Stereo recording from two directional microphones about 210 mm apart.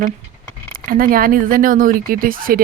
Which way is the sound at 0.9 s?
45° right (ahead or behind).